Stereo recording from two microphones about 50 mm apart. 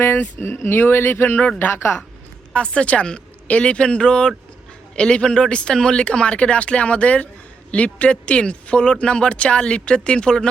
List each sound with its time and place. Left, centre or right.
0.6 s a woman's voice: left
2.5 s a woman's voice: left